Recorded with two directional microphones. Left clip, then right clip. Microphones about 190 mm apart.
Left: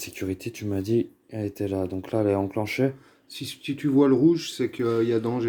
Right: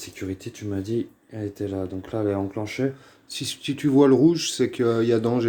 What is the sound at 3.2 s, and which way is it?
Speech, 20° right (ahead or behind).